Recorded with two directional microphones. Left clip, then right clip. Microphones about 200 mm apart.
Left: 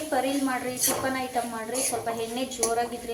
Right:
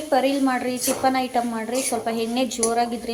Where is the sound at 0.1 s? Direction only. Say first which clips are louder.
Right 7 dB; 40° right (ahead or behind).